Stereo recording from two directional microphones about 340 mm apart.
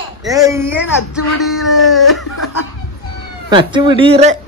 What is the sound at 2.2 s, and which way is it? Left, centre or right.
Laughter, left.